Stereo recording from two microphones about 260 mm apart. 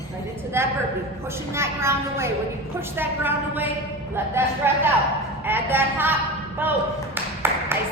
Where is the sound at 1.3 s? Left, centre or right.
Centre.